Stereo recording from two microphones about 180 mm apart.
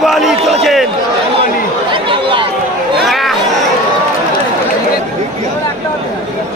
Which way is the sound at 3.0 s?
Centre (ahead or behind).